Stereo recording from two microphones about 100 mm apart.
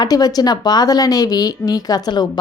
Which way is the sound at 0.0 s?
40° left (ahead or behind).